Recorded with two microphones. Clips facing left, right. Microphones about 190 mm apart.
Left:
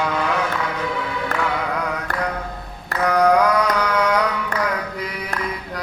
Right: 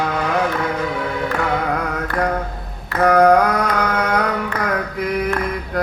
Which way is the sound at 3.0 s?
50° right (ahead or behind).